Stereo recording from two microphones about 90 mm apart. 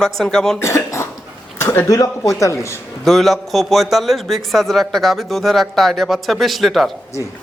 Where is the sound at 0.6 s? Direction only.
30° left (ahead or behind).